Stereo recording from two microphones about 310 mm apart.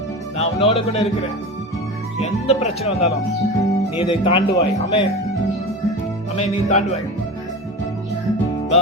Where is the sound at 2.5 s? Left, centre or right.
Left.